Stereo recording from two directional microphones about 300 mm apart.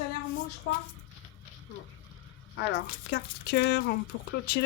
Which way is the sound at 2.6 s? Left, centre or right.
Left.